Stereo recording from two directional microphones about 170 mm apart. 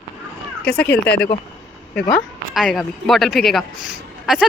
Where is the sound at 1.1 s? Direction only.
80° left.